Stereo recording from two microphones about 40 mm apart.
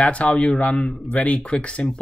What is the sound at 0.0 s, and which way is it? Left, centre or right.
Speech, left.